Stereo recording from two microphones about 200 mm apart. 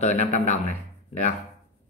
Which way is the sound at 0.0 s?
35° left (ahead or behind).